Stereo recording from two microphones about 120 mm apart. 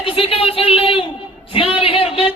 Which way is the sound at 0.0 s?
50° left (ahead or behind).